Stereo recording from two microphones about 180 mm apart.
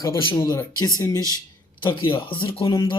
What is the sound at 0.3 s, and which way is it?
Speech, 20° left (ahead or behind).